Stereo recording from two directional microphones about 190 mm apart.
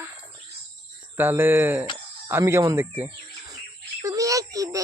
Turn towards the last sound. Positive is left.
turn(degrees=-20)  # may be behind; listen again after turning